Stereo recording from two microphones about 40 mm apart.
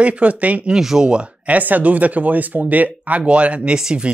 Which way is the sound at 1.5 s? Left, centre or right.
Right.